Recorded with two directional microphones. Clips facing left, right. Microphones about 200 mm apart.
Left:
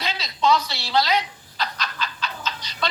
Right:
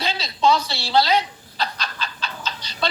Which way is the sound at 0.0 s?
30° right (ahead or behind).